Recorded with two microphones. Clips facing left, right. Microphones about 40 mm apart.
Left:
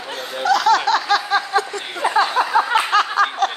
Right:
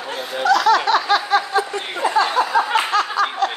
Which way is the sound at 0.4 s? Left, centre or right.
Centre.